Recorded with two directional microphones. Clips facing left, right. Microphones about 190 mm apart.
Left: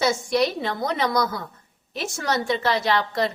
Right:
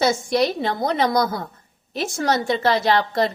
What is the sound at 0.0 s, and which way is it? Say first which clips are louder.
A woman's voice: right 2 dB; 35° right (ahead or behind).